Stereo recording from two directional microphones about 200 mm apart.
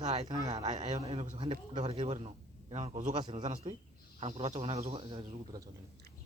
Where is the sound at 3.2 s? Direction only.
20° right (ahead or behind).